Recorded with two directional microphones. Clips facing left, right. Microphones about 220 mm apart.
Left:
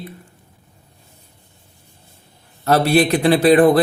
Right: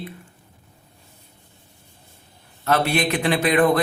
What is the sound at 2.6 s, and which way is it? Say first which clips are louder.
Speech: left 6 dB; 35° left (ahead or behind).